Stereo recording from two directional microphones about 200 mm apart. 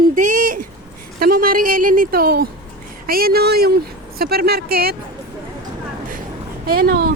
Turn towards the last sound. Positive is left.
turn(degrees=-50)  # may be behind; listen again after turning